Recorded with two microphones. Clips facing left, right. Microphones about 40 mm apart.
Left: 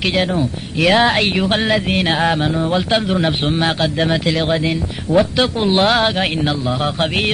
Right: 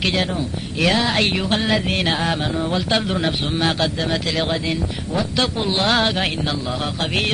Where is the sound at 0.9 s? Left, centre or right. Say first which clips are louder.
Left 8 dB; left.